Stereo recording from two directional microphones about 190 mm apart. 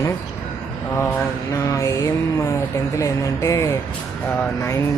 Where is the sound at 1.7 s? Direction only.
15° left (ahead or behind).